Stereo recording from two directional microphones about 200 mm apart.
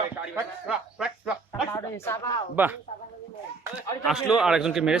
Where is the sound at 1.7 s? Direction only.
15° left (ahead or behind).